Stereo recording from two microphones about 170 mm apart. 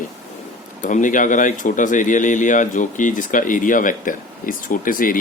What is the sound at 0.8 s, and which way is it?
Speech, 50° left (ahead or behind).